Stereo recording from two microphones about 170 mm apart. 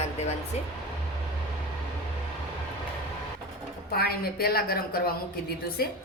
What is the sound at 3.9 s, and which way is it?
Speech, 65° left (ahead or behind).